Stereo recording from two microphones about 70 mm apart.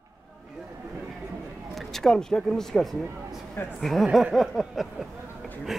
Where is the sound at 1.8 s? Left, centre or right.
Centre.